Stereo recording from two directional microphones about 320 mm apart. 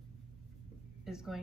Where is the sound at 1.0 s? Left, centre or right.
Centre.